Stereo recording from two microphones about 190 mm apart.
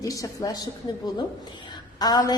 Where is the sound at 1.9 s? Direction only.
20° left (ahead or behind).